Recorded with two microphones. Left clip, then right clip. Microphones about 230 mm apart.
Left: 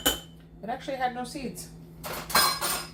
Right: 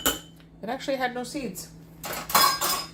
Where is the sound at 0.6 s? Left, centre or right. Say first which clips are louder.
Right 4 dB; right.